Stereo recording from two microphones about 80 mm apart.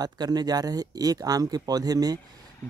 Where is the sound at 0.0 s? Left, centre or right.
Right.